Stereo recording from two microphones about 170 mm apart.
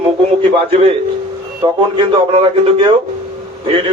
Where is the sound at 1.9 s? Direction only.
35° right (ahead or behind).